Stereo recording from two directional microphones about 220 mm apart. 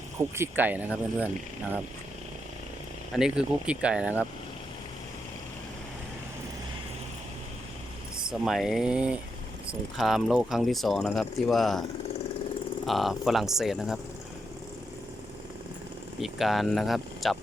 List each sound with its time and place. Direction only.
0.2 s speech: 10° right (ahead or behind)
3.2 s speech: 5° right (ahead or behind)
8.3 s speech: centre (ahead or behind)
12.8 s speech: centre (ahead or behind)
16.2 s speech: centre (ahead or behind)